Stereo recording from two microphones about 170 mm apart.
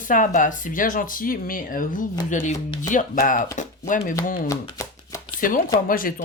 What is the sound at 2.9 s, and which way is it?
Speech, 50° left (ahead or behind).